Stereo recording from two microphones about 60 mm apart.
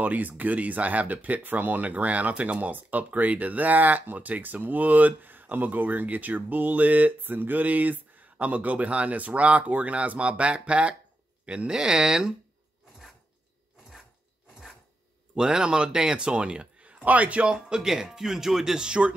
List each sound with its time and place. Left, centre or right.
0.0 s a man's voice: right
14.5 s filing: centre
15.3 s a man's voice: centre